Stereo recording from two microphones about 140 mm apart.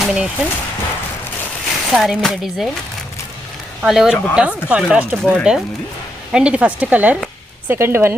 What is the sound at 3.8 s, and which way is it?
Speech, 5° right (ahead or behind).